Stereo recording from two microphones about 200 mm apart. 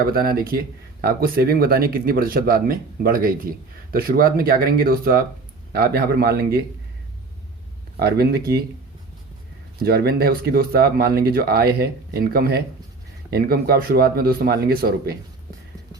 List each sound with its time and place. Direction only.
0.0 s speech: 50° right (ahead or behind)
7.9 s speech: 50° right (ahead or behind)
9.7 s speech: 50° right (ahead or behind)